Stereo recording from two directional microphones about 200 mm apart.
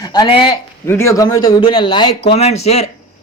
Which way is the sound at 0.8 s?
15° left (ahead or behind).